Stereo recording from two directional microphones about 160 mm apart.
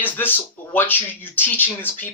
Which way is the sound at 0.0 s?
10° left (ahead or behind).